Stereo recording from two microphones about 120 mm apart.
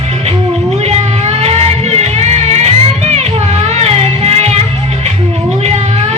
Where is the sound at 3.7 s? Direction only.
60° right (ahead or behind).